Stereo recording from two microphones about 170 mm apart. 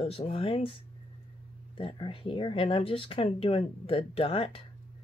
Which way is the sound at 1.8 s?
30° left (ahead or behind).